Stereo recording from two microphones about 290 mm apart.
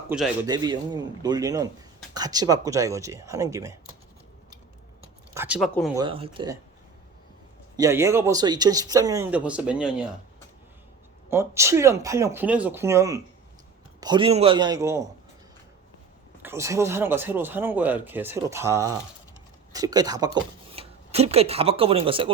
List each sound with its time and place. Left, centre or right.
0.1 s speech: centre
5.3 s speech: centre
6.0 s speech: centre
7.8 s speech: centre
11.3 s speech: centre
16.4 s speech: centre